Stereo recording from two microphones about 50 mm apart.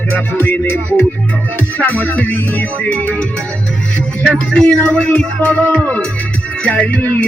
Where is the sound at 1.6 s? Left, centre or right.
Left.